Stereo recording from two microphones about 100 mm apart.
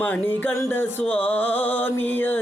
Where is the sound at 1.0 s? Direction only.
15° left (ahead or behind).